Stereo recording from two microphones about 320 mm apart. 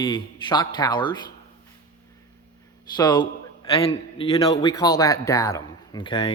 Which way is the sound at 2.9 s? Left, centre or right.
Centre.